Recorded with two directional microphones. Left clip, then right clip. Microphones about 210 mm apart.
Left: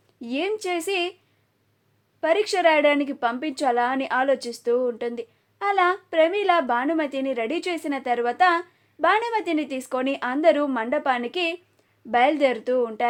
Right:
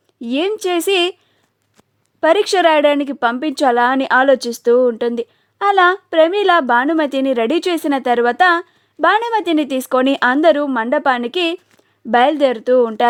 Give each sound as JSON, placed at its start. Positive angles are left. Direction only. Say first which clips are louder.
{"t": 0.2, "sound": "a woman's voice", "louder": "right 8 dB", "side_deg": -45}
{"t": 2.2, "sound": "a woman's voice", "louder": "right 7 dB", "side_deg": -45}